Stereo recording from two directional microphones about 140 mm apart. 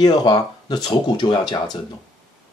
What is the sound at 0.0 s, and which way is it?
Speech, 30° left (ahead or behind).